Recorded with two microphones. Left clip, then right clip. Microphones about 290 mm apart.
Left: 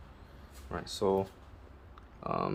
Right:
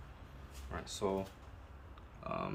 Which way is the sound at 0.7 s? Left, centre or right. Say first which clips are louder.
Left 7 dB; left.